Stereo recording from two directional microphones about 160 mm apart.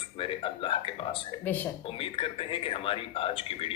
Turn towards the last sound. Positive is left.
turn(degrees=35)  # may be behind; listen again after turning